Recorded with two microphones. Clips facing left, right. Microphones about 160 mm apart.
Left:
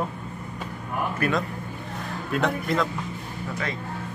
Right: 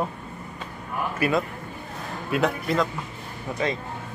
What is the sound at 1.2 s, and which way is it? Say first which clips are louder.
Speech: right 4 dB; 5° right (ahead or behind).